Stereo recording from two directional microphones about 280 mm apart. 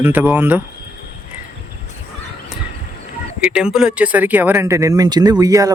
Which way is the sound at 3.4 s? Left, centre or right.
Centre.